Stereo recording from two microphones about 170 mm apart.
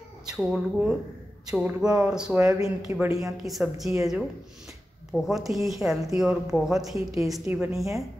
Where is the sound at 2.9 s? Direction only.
20° right (ahead or behind).